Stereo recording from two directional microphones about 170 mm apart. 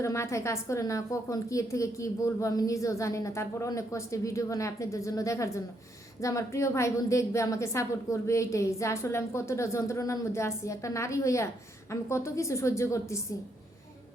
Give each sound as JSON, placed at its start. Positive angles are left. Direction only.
{"t": 0.0, "sound": "a woman's voice", "side_deg": 15}